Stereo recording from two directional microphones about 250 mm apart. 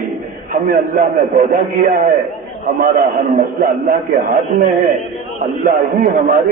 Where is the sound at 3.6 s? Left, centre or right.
Right.